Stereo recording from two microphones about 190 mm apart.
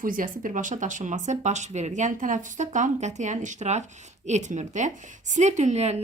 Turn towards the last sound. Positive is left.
turn(degrees=-35)  # may be behind; listen again after turning